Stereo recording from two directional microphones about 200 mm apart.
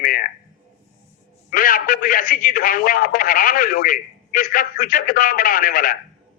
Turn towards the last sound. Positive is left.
turn(degrees=45)  # may be behind; listen again after turning